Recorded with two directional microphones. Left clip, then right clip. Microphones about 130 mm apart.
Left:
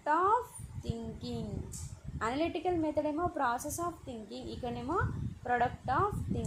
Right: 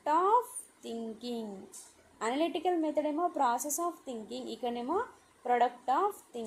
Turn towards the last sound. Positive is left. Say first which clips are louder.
# right 2 dB
turn(degrees=0)  # may be behind; listen again after turning